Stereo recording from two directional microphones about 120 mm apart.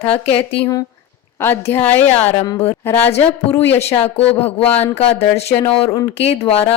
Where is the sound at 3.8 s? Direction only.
60° left (ahead or behind).